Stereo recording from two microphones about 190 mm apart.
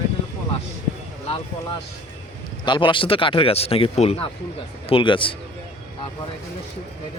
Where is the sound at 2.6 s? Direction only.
25° left (ahead or behind).